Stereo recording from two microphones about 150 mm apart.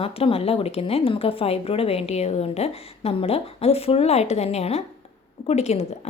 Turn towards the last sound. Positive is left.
turn(degrees=45)  # may be behind; listen again after turning